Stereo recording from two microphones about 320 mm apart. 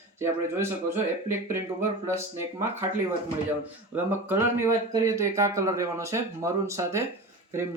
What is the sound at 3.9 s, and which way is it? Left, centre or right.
Speech, centre.